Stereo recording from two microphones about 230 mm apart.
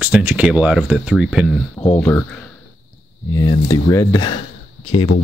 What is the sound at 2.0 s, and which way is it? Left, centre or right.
Speech, centre.